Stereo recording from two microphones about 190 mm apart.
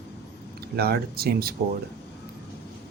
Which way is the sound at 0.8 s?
55° right (ahead or behind).